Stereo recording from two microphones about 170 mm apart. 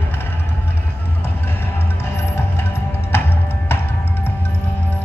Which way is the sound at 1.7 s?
15° left (ahead or behind).